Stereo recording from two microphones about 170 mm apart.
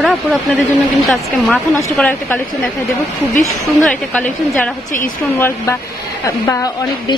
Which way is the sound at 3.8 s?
10° left (ahead or behind).